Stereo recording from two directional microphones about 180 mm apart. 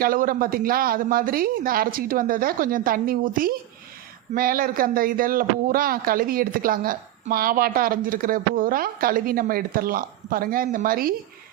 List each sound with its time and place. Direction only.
0.0 s speech: 50° right (ahead or behind)